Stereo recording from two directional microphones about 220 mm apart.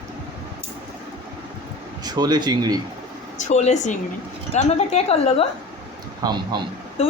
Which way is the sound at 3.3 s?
30° left (ahead or behind).